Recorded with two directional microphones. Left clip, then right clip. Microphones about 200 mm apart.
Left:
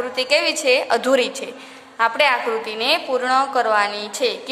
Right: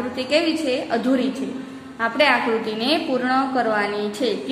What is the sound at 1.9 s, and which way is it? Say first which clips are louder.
A woman's voice: left 1 dB; 30° left (ahead or behind).